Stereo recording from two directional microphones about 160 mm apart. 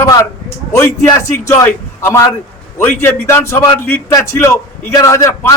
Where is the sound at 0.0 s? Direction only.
15° left (ahead or behind).